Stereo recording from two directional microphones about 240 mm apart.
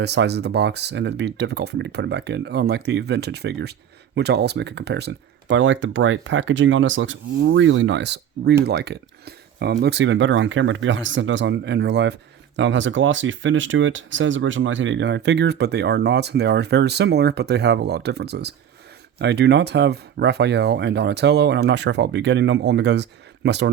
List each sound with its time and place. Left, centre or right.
0.0 s speech: right